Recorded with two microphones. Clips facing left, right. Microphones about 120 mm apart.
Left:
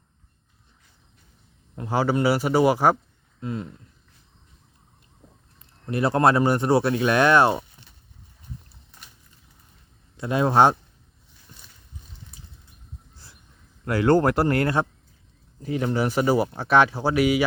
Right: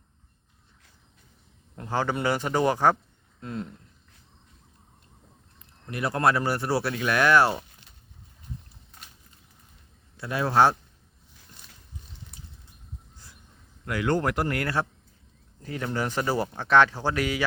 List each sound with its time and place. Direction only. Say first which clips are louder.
1.7 s a man's voice: left 5 dB; 10° left (ahead or behind)
5.9 s speech: left 5 dB; 30° left (ahead or behind)
10.2 s speech: left 3 dB; 20° left (ahead or behind)
13.8 s speech: left 7 dB; 35° left (ahead or behind); by 17.4 s 15° left (ahead or behind)